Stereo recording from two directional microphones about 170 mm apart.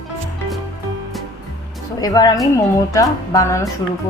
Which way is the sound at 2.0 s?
20° left (ahead or behind).